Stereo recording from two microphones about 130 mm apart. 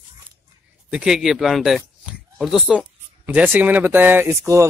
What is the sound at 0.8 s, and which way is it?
A man's voice, 5° right (ahead or behind).